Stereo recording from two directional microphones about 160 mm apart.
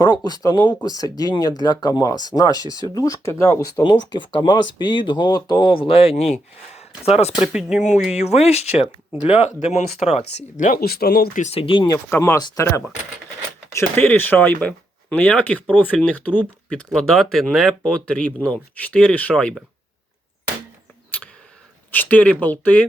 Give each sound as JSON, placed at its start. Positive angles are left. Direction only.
{"t": 0.0, "sound": "speech", "side_deg": 25}
{"t": 7.4, "sound": "speech", "side_deg": -5}
{"t": 7.8, "sound": "speech", "side_deg": 50}
{"t": 10.3, "sound": "speech", "side_deg": 55}
{"t": 11.4, "sound": "speech", "side_deg": 35}
{"t": 12.0, "sound": "speech", "side_deg": 15}
{"t": 21.9, "sound": "speech", "side_deg": 10}